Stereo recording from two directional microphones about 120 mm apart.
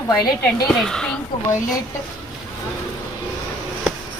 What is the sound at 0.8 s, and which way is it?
Speech, 5° left (ahead or behind).